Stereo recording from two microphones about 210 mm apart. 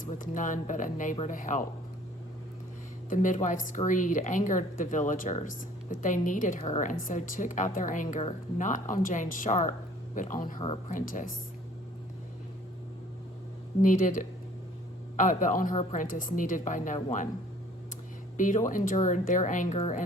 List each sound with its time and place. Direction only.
0.0 s speech: 40° left (ahead or behind)
3.1 s speech: 35° left (ahead or behind)
13.8 s speech: 40° left (ahead or behind)
18.3 s speech: 40° left (ahead or behind)